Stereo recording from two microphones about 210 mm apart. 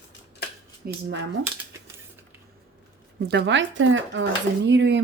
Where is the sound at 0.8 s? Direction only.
45° right (ahead or behind).